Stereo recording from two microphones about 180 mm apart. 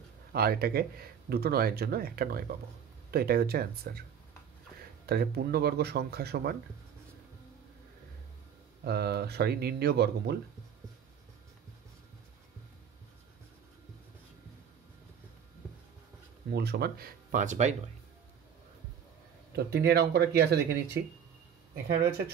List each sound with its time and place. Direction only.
0.3 s speech: 60° right (ahead or behind)
5.0 s speech: 60° right (ahead or behind)
8.8 s speech: 65° right (ahead or behind)
16.5 s speech: 65° right (ahead or behind); by 17.7 s 40° right (ahead or behind)
19.5 s speech: 65° right (ahead or behind)